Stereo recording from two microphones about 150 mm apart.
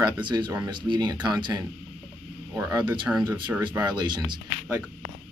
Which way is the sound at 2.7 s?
30° right (ahead or behind).